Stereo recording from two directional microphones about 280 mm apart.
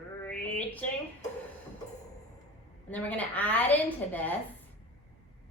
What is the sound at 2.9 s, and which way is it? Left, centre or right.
A woman's voice, centre.